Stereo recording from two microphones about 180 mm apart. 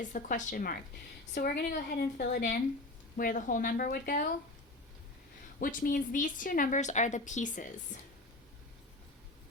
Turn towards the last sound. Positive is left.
turn(degrees=45)  # may be behind; listen again after turning